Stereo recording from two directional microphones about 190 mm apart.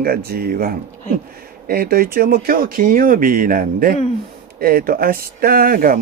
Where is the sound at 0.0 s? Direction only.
50° right (ahead or behind).